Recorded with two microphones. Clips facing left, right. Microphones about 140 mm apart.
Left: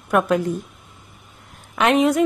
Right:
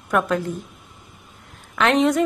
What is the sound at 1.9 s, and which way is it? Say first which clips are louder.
Speech: left 1 dB; 5° left (ahead or behind).